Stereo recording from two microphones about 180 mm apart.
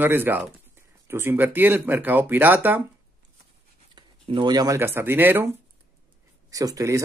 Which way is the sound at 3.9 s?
25° right (ahead or behind).